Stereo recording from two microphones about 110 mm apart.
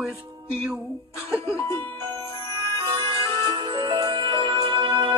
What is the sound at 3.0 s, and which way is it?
Music, 40° right (ahead or behind).